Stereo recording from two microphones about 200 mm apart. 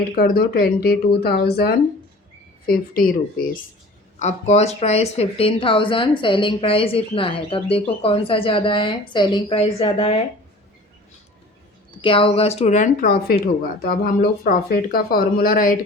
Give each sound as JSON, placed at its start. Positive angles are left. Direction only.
{"t": 0.2, "sound": "speech", "side_deg": 50}
{"t": 4.2, "sound": "speech", "side_deg": 35}
{"t": 12.0, "sound": "speech", "side_deg": 25}